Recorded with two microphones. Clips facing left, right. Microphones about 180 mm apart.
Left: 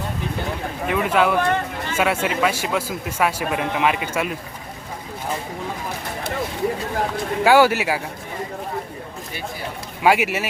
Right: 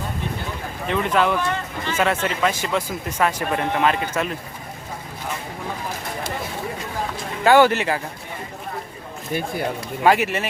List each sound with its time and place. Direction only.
0.9 s speech: 10° left (ahead or behind)
1.4 s a sound: 55° left (ahead or behind)
2.0 s speech: 10° left (ahead or behind)
7.4 s speech: 10° left (ahead or behind)
10.0 s speech: 10° left (ahead or behind)